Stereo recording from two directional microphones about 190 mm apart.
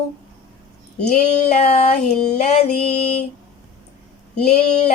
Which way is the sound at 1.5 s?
35° left (ahead or behind).